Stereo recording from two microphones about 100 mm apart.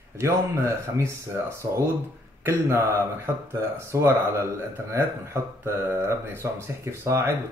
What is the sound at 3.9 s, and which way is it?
Speech, 25° right (ahead or behind).